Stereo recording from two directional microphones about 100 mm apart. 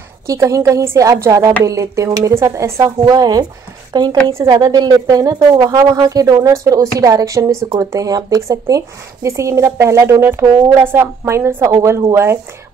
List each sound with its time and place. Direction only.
0.3 s a woman's voice: 30° right (ahead or behind)